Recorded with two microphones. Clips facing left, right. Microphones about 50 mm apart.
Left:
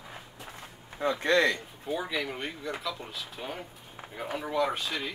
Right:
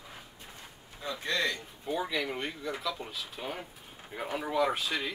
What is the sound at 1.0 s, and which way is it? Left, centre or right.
Speech, left.